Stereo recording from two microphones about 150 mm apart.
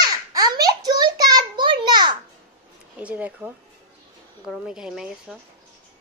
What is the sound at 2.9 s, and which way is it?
Speech, 10° right (ahead or behind).